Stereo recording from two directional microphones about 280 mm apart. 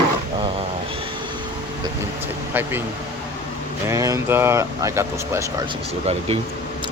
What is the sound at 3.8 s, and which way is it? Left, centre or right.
Speech, centre.